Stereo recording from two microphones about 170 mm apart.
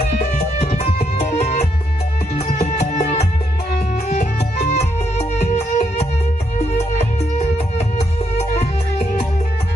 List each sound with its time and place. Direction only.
0.2 s music: 40° left (ahead or behind)